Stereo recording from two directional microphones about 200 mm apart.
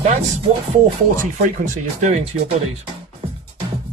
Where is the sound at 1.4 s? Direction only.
35° right (ahead or behind).